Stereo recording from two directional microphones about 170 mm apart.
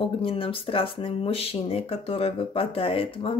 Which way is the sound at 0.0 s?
30° left (ahead or behind).